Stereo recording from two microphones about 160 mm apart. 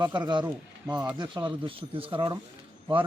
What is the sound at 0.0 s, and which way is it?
Speech, 30° right (ahead or behind).